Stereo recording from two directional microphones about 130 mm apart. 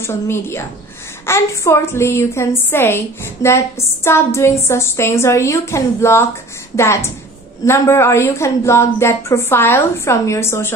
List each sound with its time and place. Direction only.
0.0 s a woman's voice: 20° left (ahead or behind)